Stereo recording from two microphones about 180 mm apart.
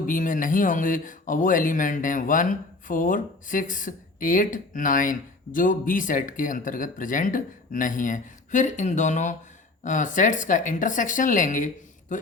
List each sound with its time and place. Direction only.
0.0 s speech: 45° left (ahead or behind)